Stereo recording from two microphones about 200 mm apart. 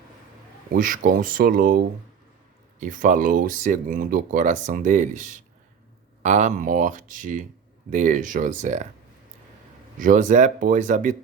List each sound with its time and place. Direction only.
0.7 s speech: 45° right (ahead or behind)
2.8 s speech: 40° right (ahead or behind)
10.0 s speech: 40° right (ahead or behind)